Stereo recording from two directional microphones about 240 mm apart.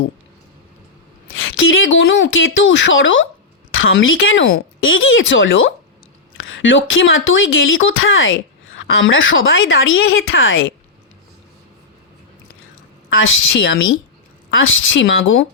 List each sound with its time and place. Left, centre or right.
1.4 s a woman's voice: left
13.7 s a woman's voice: left